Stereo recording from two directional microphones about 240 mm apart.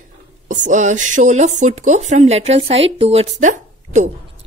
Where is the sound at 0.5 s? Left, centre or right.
Right.